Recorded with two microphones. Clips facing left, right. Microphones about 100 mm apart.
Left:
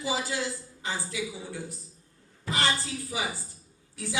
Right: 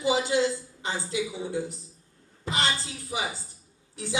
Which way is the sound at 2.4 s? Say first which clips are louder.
Even; 20° right (ahead or behind).